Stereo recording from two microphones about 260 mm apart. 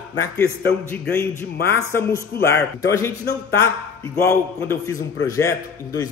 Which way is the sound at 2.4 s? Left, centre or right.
Centre.